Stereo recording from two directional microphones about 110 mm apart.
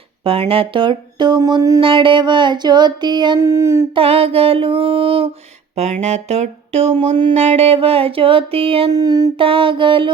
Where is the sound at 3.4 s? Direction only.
25° right (ahead or behind).